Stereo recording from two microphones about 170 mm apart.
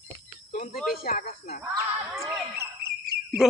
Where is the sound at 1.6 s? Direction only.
15° right (ahead or behind).